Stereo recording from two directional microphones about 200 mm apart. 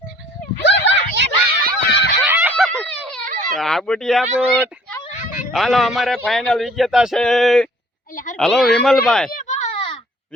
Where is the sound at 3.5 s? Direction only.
Centre (ahead or behind).